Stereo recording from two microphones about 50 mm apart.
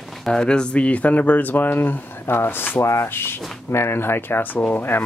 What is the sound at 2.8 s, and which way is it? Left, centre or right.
Speech, left.